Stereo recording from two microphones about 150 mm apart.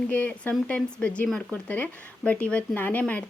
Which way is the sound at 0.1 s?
10° left (ahead or behind).